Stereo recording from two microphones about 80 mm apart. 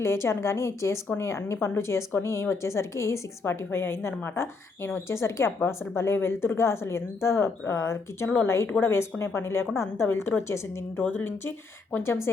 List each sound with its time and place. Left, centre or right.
0.0 s a woman's voice: left